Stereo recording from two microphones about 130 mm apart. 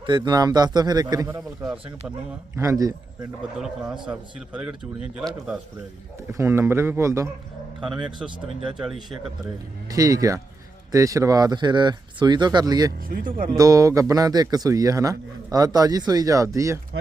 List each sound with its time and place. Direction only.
0.0 s speech: 35° right (ahead or behind)
2.6 s speech: 25° right (ahead or behind)
4.0 s speech: 5° right (ahead or behind)
6.3 s speech: 20° right (ahead or behind)
7.9 s speech: 5° right (ahead or behind)
9.9 s speech: 25° right (ahead or behind)
13.1 s speech: 90° right
13.6 s speech: 25° right (ahead or behind)